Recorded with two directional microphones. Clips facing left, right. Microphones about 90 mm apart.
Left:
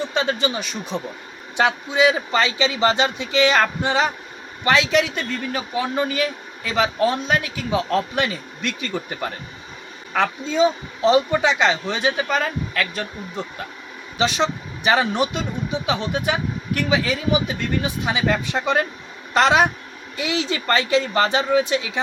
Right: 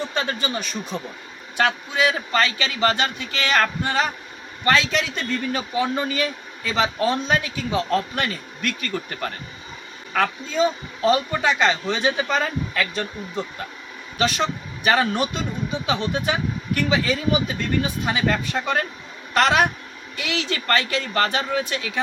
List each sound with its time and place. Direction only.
0.0 s a man's voice: 15° left (ahead or behind)
10.5 s speech: 15° left (ahead or behind)
14.2 s speech: 20° left (ahead or behind)
19.3 s speech: 20° left (ahead or behind)